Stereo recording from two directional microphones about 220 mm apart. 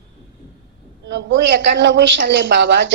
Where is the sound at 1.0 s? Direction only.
55° right (ahead or behind).